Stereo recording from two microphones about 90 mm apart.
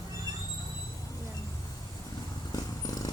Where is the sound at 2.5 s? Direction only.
45° left (ahead or behind).